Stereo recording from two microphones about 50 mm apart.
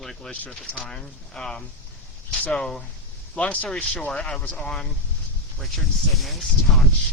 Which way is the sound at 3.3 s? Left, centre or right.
Left.